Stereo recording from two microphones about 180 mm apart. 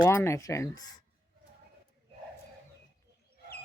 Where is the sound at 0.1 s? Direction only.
15° left (ahead or behind).